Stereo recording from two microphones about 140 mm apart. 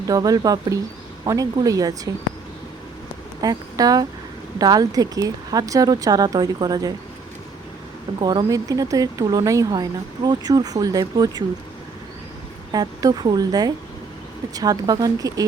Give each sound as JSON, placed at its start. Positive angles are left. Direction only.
{"t": 0.1, "sound": "speech", "side_deg": -25}
{"t": 3.4, "sound": "speech", "side_deg": -25}
{"t": 8.2, "sound": "speech", "side_deg": -35}
{"t": 12.7, "sound": "speech", "side_deg": -30}